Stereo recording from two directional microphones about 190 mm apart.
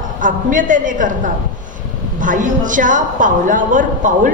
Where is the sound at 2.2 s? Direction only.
45° right (ahead or behind).